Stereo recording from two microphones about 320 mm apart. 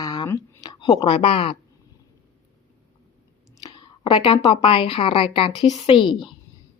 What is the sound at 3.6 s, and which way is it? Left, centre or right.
A woman's voice, centre.